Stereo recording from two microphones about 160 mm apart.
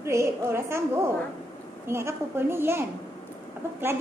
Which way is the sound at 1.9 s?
15° right (ahead or behind).